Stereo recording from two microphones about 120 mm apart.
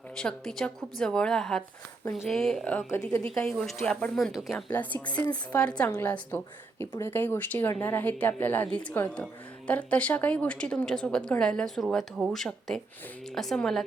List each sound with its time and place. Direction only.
0.2 s a woman's voice: 5° left (ahead or behind)
4.7 s a woman's voice: 15° left (ahead or behind)
5.2 s speech: 30° left (ahead or behind)
5.5 s a woman's voice: 10° left (ahead or behind)